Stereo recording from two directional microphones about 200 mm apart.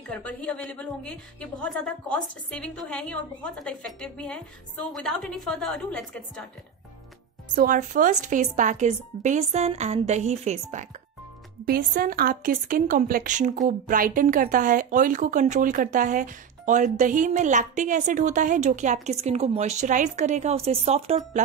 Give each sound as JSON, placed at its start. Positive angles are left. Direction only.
{"t": 0.1, "sound": "a woman's voice", "side_deg": 5}
{"t": 7.5, "sound": "a woman's voice", "side_deg": -45}
{"t": 11.6, "sound": "a woman's voice", "side_deg": -45}